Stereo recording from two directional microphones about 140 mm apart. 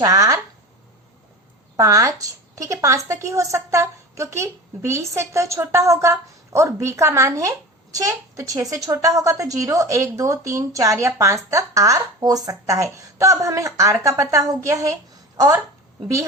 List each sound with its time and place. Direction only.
0.0 s a woman's voice: 25° right (ahead or behind)
1.7 s a woman's voice: 25° right (ahead or behind)